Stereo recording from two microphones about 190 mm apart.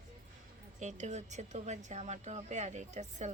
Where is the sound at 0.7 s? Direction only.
40° right (ahead or behind).